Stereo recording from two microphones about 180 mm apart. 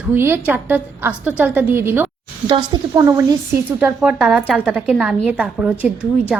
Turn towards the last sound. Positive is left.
turn(degrees=-5)  # may be behind; listen again after turning